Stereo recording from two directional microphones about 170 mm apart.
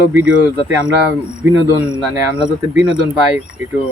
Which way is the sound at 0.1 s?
10° right (ahead or behind).